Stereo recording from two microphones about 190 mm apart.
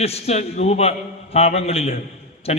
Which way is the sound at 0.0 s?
35° left (ahead or behind).